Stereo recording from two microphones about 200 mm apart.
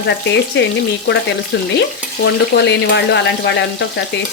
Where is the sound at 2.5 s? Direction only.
60° left (ahead or behind).